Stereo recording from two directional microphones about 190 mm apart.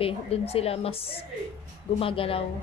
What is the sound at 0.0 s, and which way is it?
A woman's voice, 30° left (ahead or behind).